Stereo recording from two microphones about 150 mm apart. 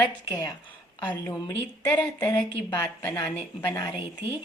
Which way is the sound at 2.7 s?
25° left (ahead or behind).